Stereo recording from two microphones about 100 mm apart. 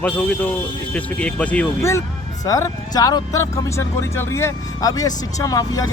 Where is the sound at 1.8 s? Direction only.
30° left (ahead or behind).